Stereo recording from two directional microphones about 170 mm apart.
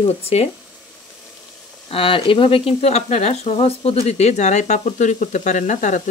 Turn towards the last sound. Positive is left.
turn(degrees=45)  # may be behind; listen again after turning